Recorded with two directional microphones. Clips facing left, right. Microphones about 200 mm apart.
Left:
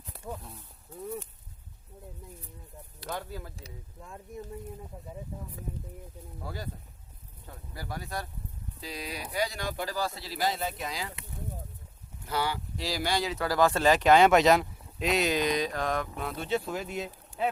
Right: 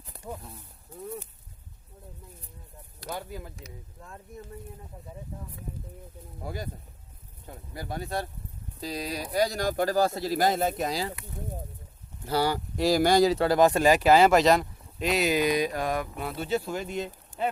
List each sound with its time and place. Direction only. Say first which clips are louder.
3.1 s speech: right 1 dB; 15° right (ahead or behind)
5.3 s speech: right 2 dB; 10° left (ahead or behind)
6.4 s speech: right 3 dB; 15° right (ahead or behind)
8.8 s speech: right 6 dB; 40° right (ahead or behind)
12.2 s speech: right 5 dB; 35° right (ahead or behind); by 17.5 s 5° left (ahead or behind)